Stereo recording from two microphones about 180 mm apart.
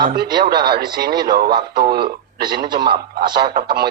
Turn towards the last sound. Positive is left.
turn(degrees=-60)  # may be behind; listen again after turning